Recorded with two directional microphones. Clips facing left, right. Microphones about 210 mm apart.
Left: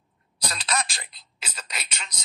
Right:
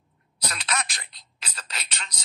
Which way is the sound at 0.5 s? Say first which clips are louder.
Left 2 dB; 35° left (ahead or behind).